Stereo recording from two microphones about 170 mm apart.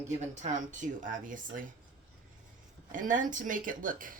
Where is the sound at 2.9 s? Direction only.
50° right (ahead or behind).